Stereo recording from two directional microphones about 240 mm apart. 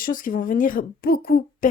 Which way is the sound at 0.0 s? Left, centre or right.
Left.